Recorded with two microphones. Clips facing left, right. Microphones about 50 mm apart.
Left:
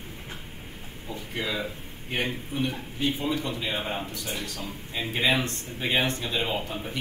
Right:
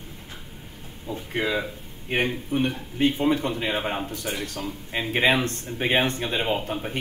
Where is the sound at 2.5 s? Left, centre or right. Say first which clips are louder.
Right 5 dB; right.